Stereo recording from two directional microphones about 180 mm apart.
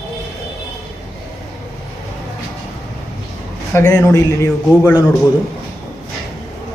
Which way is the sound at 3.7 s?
15° left (ahead or behind).